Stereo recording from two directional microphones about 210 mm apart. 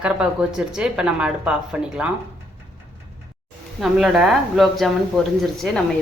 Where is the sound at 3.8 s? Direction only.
Centre (ahead or behind).